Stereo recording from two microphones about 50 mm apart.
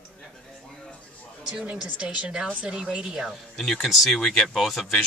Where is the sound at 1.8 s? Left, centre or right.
Right.